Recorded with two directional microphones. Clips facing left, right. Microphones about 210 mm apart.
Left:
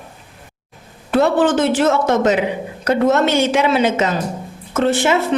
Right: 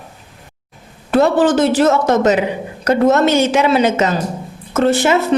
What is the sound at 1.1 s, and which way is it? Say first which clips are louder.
A woman's voice: right 2 dB; 40° right (ahead or behind).